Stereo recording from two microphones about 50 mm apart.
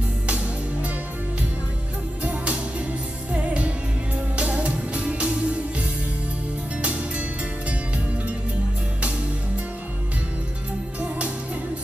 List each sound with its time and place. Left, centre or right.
3.3 s music: right
11.0 s music: right